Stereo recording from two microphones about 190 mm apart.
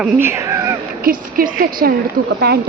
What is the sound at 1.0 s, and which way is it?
A woman's voice, 50° right (ahead or behind).